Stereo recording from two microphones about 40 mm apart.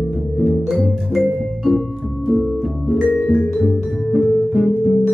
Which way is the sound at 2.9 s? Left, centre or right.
Centre.